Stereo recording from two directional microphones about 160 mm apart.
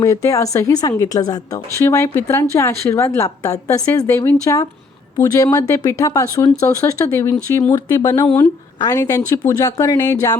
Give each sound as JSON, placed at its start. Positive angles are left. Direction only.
{"t": 0.0, "sound": "speech", "side_deg": 20}